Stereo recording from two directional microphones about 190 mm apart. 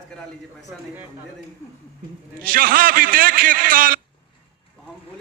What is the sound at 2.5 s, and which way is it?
A man's voice, 50° right (ahead or behind).